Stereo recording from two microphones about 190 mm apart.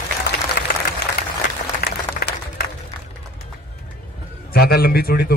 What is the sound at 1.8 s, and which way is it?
Music, 55° left (ahead or behind).